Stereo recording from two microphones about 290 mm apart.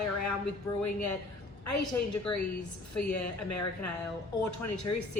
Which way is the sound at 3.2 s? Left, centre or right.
Left.